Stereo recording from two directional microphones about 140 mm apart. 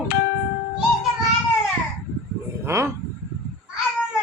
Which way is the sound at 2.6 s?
20° right (ahead or behind).